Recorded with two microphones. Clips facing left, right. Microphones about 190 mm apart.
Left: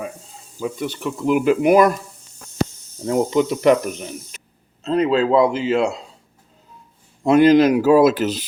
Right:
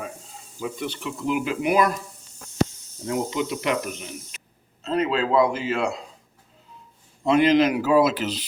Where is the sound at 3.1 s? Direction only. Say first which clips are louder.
Left 7 dB; 45° left (ahead or behind).